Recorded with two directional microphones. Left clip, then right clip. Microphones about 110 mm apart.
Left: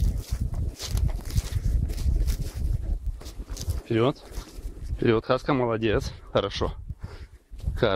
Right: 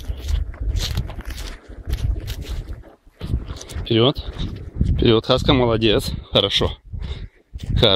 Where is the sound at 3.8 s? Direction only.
10° right (ahead or behind).